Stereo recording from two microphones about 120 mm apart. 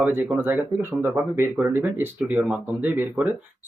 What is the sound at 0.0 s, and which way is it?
Speech, 15° right (ahead or behind).